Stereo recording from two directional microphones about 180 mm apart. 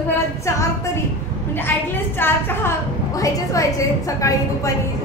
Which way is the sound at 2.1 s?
10° left (ahead or behind).